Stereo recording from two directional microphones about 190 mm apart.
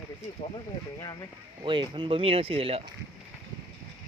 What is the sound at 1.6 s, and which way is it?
Speech, 25° right (ahead or behind).